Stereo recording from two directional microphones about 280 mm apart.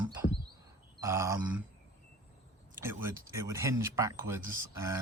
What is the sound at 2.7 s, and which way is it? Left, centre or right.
Speech, centre.